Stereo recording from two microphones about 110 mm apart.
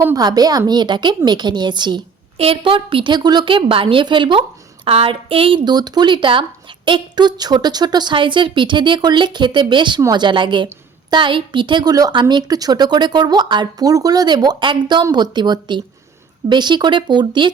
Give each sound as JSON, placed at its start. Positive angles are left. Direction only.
{"t": 0.2, "sound": "a woman's voice", "side_deg": -35}
{"t": 2.4, "sound": "a woman's voice", "side_deg": -55}
{"t": 4.9, "sound": "a sound", "side_deg": -60}
{"t": 5.6, "sound": "a woman's voice", "side_deg": -40}